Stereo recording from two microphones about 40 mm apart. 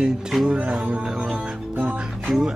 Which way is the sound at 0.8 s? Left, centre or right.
Right.